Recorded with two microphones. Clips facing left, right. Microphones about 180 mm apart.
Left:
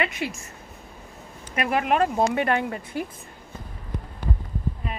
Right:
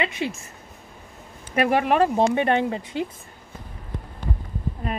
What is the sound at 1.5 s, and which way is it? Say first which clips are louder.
Speech: right 3 dB; 30° right (ahead or behind).